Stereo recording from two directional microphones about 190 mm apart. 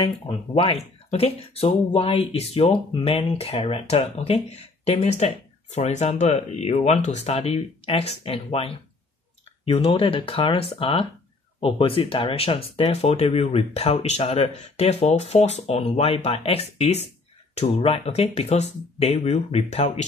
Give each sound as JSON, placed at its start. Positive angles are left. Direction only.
{"t": 0.0, "sound": "speech", "side_deg": 25}